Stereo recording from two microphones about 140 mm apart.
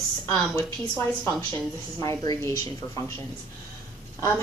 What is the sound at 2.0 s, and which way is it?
A woman's voice, 25° left (ahead or behind).